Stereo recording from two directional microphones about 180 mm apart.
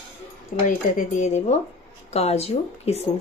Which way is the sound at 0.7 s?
45° left (ahead or behind).